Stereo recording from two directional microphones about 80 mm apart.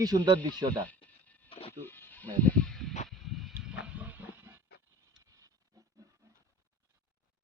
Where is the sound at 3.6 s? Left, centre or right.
Centre.